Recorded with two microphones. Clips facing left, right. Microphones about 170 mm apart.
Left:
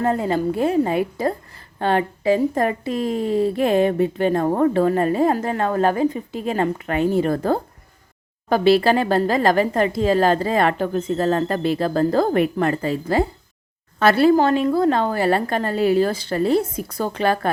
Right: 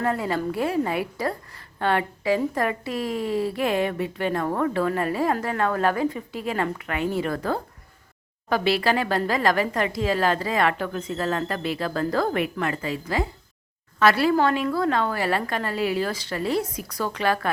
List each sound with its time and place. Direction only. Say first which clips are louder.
0.0 s a woman's voice: left 5 dB; 25° left (ahead or behind)
8.7 s speech: left 6 dB; 30° left (ahead or behind)
16.0 s a woman's voice: left 7 dB; 30° left (ahead or behind)